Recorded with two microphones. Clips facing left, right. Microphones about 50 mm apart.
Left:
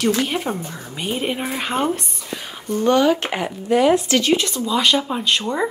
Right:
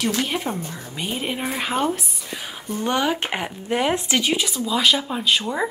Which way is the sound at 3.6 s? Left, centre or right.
Right.